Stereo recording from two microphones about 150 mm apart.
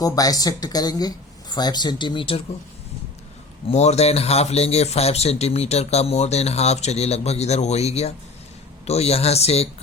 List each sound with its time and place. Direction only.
0.0 s speech: 25° left (ahead or behind)
3.7 s speech: 45° left (ahead or behind)